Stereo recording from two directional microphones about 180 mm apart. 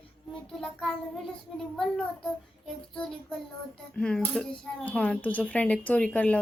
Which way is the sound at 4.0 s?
5° left (ahead or behind).